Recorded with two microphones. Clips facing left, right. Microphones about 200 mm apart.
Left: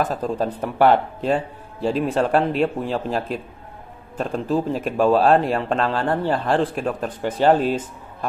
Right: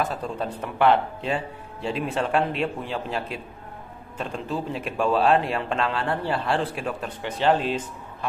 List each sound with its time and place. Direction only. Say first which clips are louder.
0.0 s a man's voice: left 5 dB; 40° left (ahead or behind)